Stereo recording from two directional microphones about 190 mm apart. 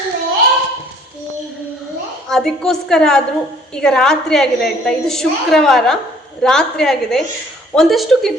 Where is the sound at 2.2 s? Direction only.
Centre (ahead or behind).